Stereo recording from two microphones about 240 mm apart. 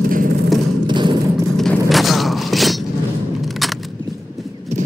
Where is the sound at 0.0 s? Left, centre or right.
Right.